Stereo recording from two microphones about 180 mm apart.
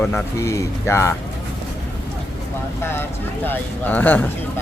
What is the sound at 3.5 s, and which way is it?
Speech, 10° left (ahead or behind).